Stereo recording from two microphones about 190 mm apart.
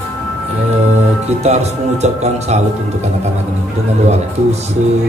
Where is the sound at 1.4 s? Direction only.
35° right (ahead or behind).